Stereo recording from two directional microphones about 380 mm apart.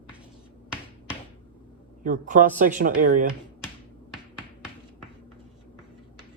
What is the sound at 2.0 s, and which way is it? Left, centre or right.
Speech, centre.